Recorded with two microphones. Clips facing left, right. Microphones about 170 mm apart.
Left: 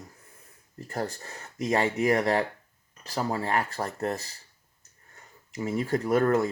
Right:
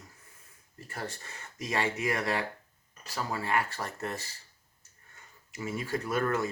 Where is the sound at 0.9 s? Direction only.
40° left (ahead or behind).